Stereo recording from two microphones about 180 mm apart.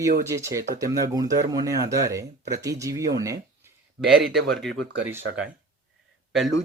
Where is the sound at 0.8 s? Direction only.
20° right (ahead or behind).